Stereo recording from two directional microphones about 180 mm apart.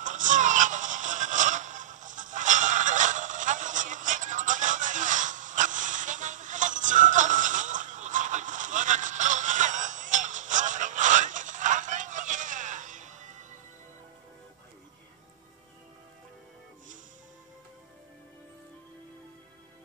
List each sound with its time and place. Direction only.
0.0 s music: 45° right (ahead or behind)